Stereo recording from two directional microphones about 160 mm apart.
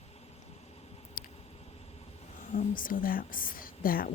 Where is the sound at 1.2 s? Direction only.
60° left (ahead or behind).